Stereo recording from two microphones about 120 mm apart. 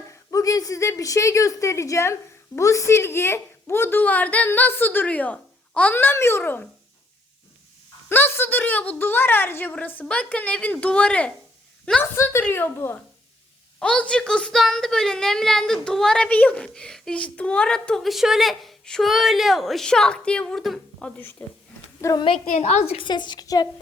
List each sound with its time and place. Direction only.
0.3 s a woman's voice: 30° left (ahead or behind)
8.1 s speech: 20° left (ahead or behind)
12.1 s a woman's voice: 20° left (ahead or behind)
22.0 s a woman's voice: 25° left (ahead or behind)
22.5 s a woman's voice: 65° left (ahead or behind)
23.0 s a woman's voice: 40° left (ahead or behind)